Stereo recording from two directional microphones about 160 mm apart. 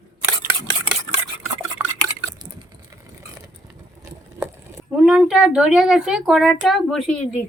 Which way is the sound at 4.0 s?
20° right (ahead or behind).